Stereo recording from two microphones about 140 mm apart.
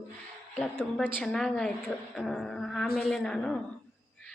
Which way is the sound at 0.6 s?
5° left (ahead or behind).